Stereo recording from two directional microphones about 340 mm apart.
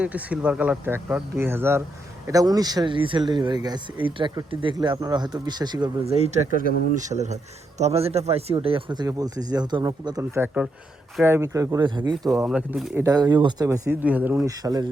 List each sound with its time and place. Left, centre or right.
0.0 s speech: centre